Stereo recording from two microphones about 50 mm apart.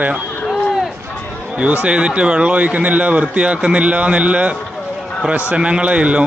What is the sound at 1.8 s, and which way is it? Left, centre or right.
A man's voice, centre.